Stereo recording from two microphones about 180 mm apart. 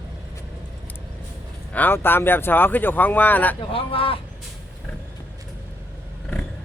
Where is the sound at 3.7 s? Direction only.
30° left (ahead or behind).